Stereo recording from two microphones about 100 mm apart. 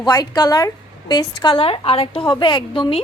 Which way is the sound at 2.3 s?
50° left (ahead or behind).